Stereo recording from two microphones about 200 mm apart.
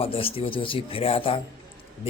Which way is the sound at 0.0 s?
25° left (ahead or behind).